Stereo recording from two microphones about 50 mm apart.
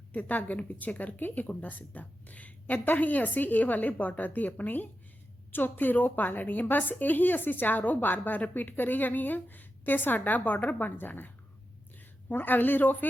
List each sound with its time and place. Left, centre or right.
0.1 s a woman's voice: left
12.3 s a woman's voice: left